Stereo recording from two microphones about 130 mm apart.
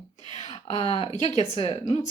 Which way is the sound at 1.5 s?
45° left (ahead or behind).